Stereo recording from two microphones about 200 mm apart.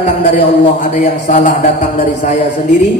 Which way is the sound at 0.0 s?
40° left (ahead or behind).